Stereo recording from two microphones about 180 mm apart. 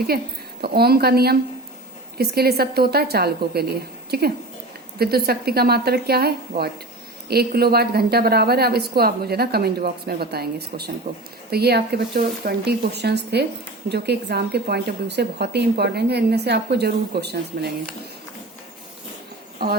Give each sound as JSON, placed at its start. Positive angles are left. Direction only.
{"t": 0.6, "sound": "a woman's voice", "side_deg": -60}